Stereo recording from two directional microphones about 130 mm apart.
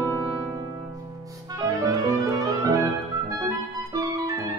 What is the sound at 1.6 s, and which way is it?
Music, 25° right (ahead or behind).